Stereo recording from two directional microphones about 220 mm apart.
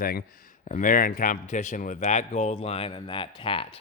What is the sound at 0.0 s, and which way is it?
A man's voice, 45° left (ahead or behind).